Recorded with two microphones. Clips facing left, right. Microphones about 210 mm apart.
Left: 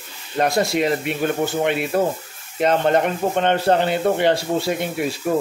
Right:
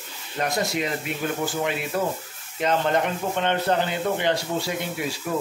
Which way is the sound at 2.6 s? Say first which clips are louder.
Left 5 dB; 55° left (ahead or behind).